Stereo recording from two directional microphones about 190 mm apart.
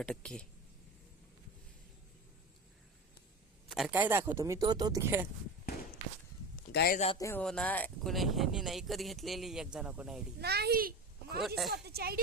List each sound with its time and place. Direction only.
0.0 s speech: 5° left (ahead or behind)
3.7 s speech: centre (ahead or behind)
6.7 s a man's voice: 60° left (ahead or behind)
7.2 s speech: 15° left (ahead or behind); by 10.2 s 5° right (ahead or behind)
10.4 s a child's voice: 55° right (ahead or behind)
11.4 s speech: centre (ahead or behind)
11.7 s speech: 55° right (ahead or behind)